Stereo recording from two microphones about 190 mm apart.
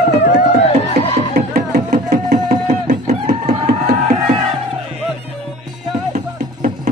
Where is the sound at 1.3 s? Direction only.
40° right (ahead or behind).